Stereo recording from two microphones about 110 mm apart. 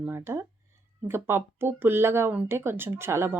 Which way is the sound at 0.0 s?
25° right (ahead or behind).